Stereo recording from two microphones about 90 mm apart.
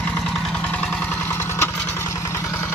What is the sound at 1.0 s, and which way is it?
Vehicle, 25° left (ahead or behind).